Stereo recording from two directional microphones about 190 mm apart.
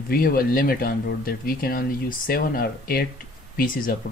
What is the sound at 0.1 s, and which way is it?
Speech, 50° left (ahead or behind).